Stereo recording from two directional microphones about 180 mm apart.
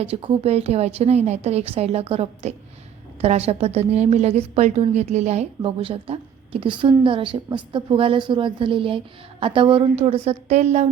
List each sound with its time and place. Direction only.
0.0 s a woman's voice: 30° right (ahead or behind)